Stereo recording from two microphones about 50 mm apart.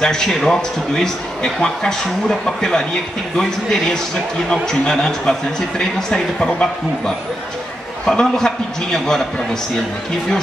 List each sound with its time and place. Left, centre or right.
0.0 s a man's voice: centre